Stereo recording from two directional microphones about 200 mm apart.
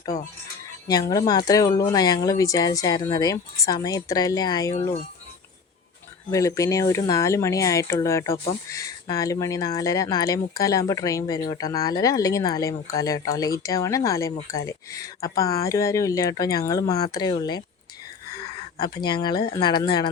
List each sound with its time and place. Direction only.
0.9 s speech: 20° left (ahead or behind)
6.3 s speech: 15° left (ahead or behind)
18.8 s speech: 20° left (ahead or behind)